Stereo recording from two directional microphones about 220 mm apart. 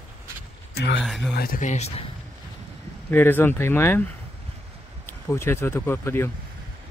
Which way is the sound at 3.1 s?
10° left (ahead or behind).